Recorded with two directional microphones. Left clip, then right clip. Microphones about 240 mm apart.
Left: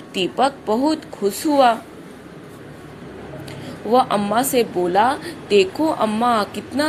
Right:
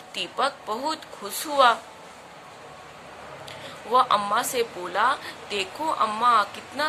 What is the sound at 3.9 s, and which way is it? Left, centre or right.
A woman's voice, centre.